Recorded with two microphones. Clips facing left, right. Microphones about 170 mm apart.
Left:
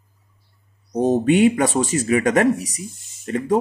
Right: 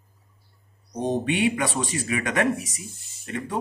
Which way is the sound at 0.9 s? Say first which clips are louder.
Left 8 dB; 45° left (ahead or behind).